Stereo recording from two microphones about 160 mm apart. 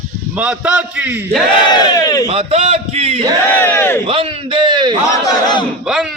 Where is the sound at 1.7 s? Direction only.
25° left (ahead or behind).